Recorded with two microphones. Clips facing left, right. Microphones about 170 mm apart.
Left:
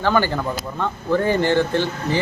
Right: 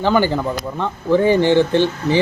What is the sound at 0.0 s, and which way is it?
Speech, 15° right (ahead or behind).